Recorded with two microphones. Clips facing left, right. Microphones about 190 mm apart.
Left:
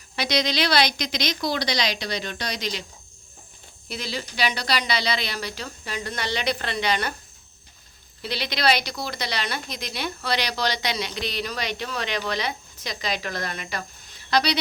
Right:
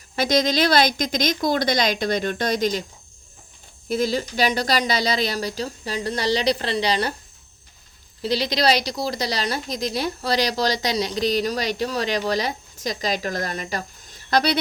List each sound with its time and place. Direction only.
0.2 s speech: 45° right (ahead or behind)
3.8 s a woman's voice: 45° right (ahead or behind)
8.2 s a woman's voice: 40° right (ahead or behind)